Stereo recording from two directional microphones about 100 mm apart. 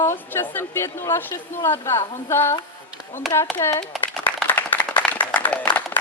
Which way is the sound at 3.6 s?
30° left (ahead or behind).